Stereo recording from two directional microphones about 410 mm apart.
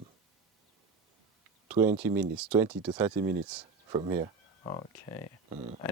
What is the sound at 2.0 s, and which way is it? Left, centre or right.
Speech, centre.